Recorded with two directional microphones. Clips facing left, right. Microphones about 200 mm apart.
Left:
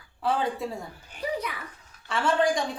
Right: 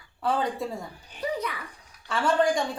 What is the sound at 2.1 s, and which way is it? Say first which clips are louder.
Speech: right 1 dB; centre (ahead or behind).